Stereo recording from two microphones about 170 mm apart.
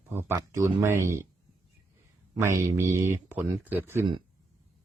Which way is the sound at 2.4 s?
15° right (ahead or behind).